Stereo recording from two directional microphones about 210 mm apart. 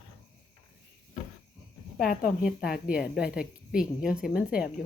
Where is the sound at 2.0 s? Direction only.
45° left (ahead or behind).